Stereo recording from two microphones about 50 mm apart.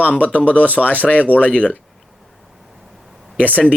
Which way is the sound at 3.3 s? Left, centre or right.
Left.